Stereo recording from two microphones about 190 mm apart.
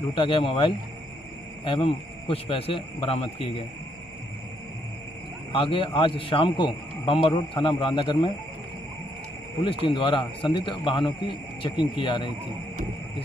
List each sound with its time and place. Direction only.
0.1 s a man's voice: 25° left (ahead or behind)
5.5 s a man's voice: 30° left (ahead or behind)
9.7 s a man's voice: 25° left (ahead or behind)